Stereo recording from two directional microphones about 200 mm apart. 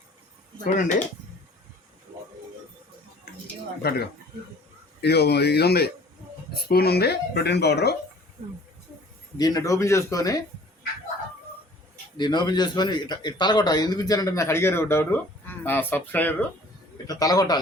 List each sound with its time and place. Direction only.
0.6 s speech: 40° left (ahead or behind)
5.0 s speech: 55° left (ahead or behind)
9.4 s speech: 20° left (ahead or behind)
12.1 s a man's voice: 20° left (ahead or behind)